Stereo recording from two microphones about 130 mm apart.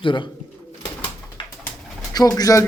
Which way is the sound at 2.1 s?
30° left (ahead or behind).